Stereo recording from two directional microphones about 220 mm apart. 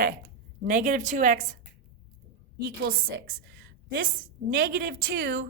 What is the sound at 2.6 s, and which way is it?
A woman's voice, 40° right (ahead or behind).